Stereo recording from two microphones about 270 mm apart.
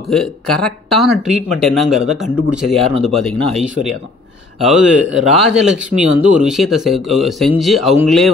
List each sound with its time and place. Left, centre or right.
0.1 s a man's voice: centre